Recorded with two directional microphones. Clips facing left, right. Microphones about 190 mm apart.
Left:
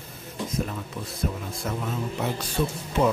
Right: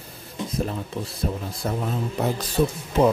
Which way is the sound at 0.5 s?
35° right (ahead or behind).